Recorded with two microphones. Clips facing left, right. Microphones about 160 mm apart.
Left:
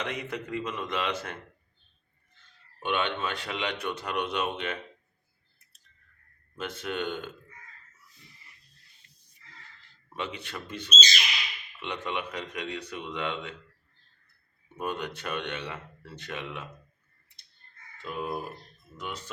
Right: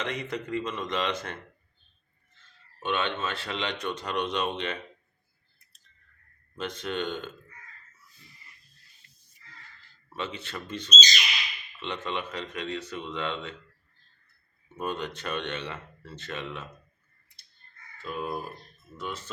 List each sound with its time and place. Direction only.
0.0 s speech: 10° left (ahead or behind)
2.8 s speech: 15° left (ahead or behind)
6.6 s speech: 5° left (ahead or behind)
10.1 s speech: 15° left (ahead or behind)
14.8 s speech: 10° left (ahead or behind)
17.9 s speech: 20° left (ahead or behind)